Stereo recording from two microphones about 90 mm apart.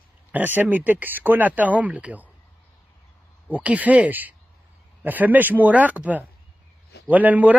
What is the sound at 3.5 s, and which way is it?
Speech, 15° right (ahead or behind).